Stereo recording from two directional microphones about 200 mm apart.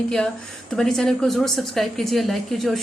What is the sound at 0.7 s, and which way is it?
A woman's voice, centre (ahead or behind).